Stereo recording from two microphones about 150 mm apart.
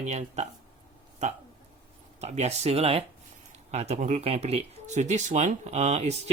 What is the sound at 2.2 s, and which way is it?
Speech, 45° right (ahead or behind).